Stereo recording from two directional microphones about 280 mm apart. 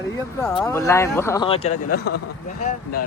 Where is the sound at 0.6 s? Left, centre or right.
Centre; by 2.1 s left.